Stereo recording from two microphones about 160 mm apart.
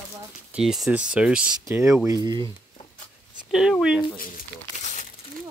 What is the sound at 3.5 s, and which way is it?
Speech, 5° right (ahead or behind).